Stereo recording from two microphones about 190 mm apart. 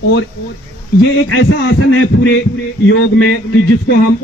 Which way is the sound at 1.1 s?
80° left.